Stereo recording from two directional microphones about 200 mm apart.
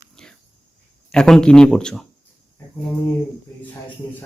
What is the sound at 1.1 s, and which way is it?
Speech, 5° left (ahead or behind).